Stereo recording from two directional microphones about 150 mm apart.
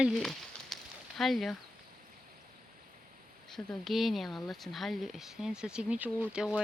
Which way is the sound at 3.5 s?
Centre (ahead or behind).